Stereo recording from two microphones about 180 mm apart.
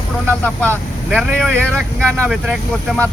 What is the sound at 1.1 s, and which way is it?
Speech, 5° left (ahead or behind).